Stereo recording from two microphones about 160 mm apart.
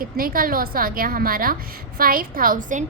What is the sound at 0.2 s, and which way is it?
A woman's voice, 60° right (ahead or behind).